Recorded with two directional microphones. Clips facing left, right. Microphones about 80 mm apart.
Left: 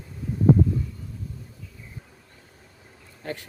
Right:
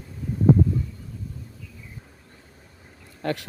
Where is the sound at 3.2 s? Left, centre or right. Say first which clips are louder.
Right 6 dB; right.